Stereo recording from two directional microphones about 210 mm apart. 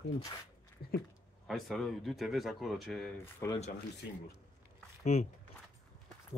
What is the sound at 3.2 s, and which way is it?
Speech, 10° left (ahead or behind).